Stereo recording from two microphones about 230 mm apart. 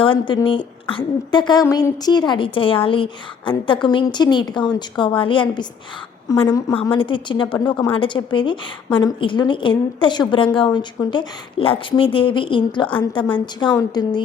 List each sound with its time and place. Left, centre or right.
0.0 s a woman's voice: left